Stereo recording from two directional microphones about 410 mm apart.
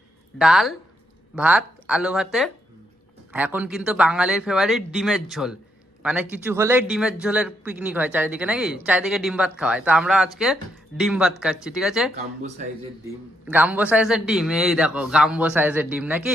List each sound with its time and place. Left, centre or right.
0.3 s a man's voice: centre
12.1 s speech: centre
13.4 s speech: centre